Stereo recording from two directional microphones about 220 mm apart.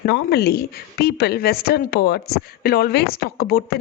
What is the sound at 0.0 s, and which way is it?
Speech, 45° left (ahead or behind).